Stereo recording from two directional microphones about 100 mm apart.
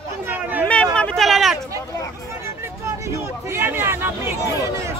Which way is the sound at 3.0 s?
25° right (ahead or behind).